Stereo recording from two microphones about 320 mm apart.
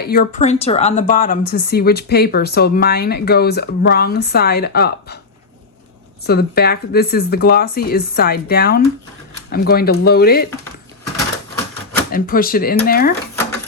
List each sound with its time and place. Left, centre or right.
0.0 s a woman's voice: left
6.2 s a woman's voice: left
12.1 s a woman's voice: left